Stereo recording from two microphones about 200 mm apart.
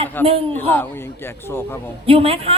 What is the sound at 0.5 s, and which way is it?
Speech, 10° left (ahead or behind).